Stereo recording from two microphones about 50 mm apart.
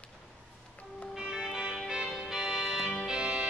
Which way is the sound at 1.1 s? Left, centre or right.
Centre.